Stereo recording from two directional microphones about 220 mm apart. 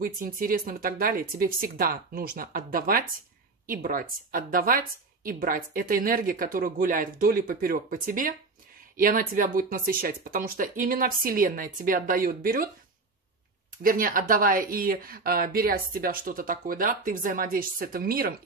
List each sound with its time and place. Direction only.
0.0 s a woman's voice: 40° right (ahead or behind)
13.8 s a woman's voice: 40° right (ahead or behind)